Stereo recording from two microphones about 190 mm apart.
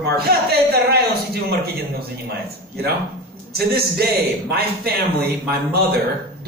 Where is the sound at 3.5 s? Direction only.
55° right (ahead or behind).